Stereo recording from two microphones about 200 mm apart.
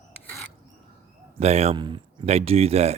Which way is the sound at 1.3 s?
35° right (ahead or behind).